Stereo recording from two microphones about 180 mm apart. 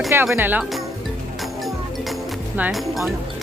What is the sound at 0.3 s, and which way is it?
Speech, 10° right (ahead or behind).